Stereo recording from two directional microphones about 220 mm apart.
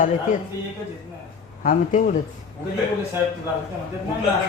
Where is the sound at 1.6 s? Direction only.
35° left (ahead or behind).